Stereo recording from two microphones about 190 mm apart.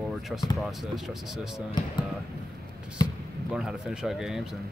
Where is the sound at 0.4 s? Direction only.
Centre (ahead or behind).